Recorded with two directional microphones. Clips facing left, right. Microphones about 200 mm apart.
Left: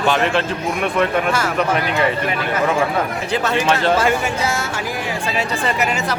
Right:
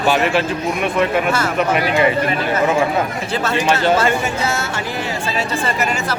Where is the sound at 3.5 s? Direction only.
Centre (ahead or behind).